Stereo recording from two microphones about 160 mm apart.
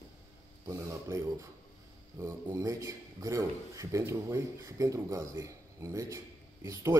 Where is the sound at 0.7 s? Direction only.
20° right (ahead or behind).